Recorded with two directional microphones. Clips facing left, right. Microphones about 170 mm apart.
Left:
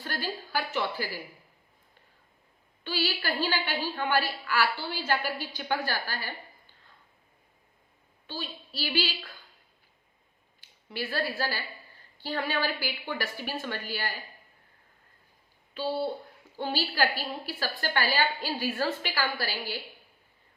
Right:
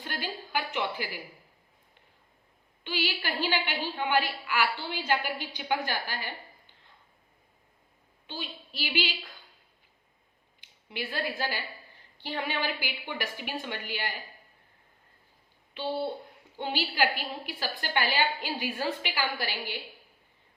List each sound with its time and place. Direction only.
0.0 s a woman's voice: 20° right (ahead or behind)
2.8 s a woman's voice: 15° right (ahead or behind)
8.8 s a woman's voice: 15° right (ahead or behind)
10.6 s a woman's voice: 20° right (ahead or behind)
16.4 s a sound: 15° right (ahead or behind)
17.4 s a woman's voice: 15° right (ahead or behind)